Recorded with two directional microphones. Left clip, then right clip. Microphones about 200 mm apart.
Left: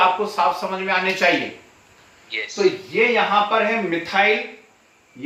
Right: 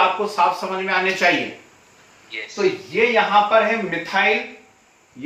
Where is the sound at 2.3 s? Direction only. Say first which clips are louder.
Left 2 dB; 20° left (ahead or behind).